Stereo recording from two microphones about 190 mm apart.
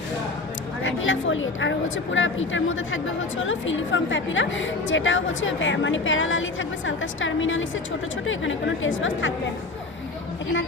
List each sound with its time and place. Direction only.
0.8 s a woman's voice: 90° left